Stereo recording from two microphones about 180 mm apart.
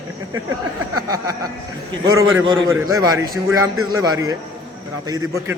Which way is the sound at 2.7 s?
15° right (ahead or behind).